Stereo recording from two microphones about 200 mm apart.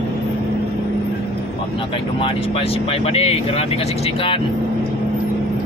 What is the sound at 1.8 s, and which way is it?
Speech, 25° left (ahead or behind).